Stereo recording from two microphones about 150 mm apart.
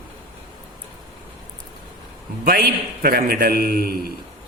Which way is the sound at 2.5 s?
85° right.